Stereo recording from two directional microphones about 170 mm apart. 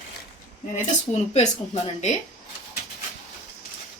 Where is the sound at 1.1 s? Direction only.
40° left (ahead or behind).